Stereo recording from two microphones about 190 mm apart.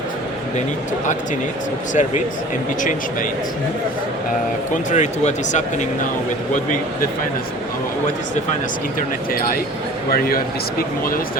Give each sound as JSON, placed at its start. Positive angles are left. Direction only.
{"t": 1.9, "sound": "speech", "side_deg": 40}
{"t": 4.9, "sound": "speech", "side_deg": 40}
{"t": 10.1, "sound": "speech", "side_deg": 50}